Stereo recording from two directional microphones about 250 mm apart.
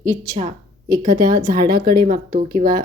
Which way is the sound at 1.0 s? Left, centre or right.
Right.